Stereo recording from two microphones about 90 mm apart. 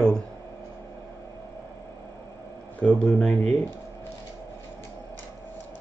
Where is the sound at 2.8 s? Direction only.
10° left (ahead or behind).